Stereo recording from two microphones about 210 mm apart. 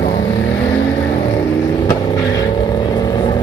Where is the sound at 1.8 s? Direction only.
15° left (ahead or behind).